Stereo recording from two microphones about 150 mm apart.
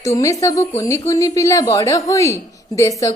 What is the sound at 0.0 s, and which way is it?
A woman's voice, 20° left (ahead or behind).